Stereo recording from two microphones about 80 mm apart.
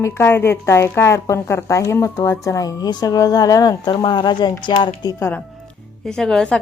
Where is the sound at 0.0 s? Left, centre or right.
Left.